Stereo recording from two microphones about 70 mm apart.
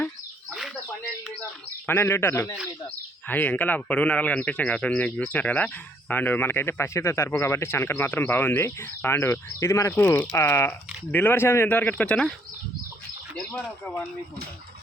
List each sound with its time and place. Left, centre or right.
1.9 s speech: left
3.2 s a man's voice: left
11.7 s a man's voice: left